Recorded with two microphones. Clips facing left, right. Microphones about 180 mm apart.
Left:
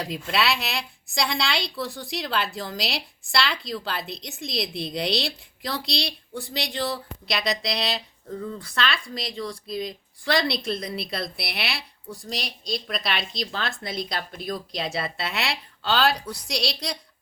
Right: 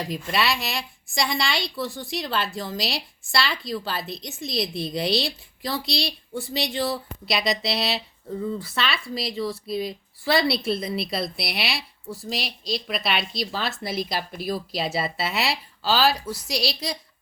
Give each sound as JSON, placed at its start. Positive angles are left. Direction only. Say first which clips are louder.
{"t": 0.0, "sound": "speech", "louder": "even", "side_deg": 0}